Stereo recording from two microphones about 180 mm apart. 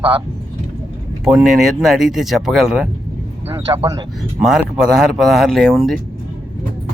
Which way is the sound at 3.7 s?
20° right (ahead or behind).